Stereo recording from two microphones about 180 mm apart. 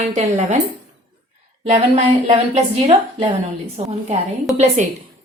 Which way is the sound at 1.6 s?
40° right (ahead or behind).